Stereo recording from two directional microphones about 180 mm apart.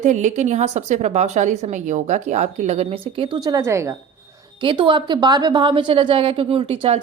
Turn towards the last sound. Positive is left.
turn(degrees=-30)  # may be behind; listen again after turning